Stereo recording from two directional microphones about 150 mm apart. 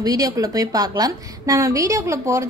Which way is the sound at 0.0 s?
25° right (ahead or behind).